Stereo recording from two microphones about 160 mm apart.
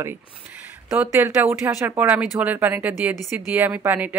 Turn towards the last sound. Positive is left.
turn(degrees=-10)  # may be behind; listen again after turning